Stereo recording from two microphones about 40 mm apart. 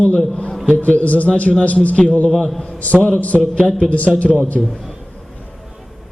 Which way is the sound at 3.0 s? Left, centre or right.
Left.